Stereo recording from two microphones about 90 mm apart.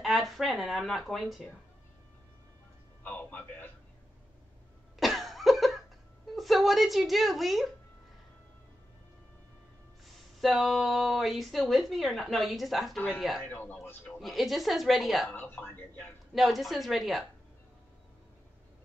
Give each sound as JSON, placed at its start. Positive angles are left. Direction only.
{"t": 0.0, "sound": "speech", "side_deg": 0}
{"t": 3.0, "sound": "a sound", "side_deg": 20}
{"t": 5.0, "sound": "cough", "side_deg": 0}
{"t": 6.3, "sound": "speech", "side_deg": 0}
{"t": 10.0, "sound": "speech", "side_deg": 0}
{"t": 13.4, "sound": "a man's voice", "side_deg": 20}
{"t": 14.2, "sound": "speech", "side_deg": 0}
{"t": 15.2, "sound": "a man's voice", "side_deg": 20}
{"t": 16.3, "sound": "speech", "side_deg": 0}